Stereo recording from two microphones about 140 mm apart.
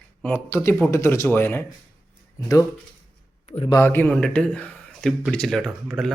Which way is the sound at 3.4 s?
45° left (ahead or behind).